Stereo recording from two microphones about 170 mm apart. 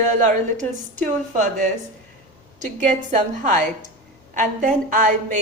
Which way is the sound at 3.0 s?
50° right (ahead or behind).